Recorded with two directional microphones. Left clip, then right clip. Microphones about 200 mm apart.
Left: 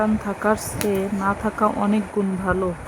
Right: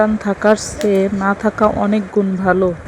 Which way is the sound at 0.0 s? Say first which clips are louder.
Right 7 dB; 25° right (ahead or behind).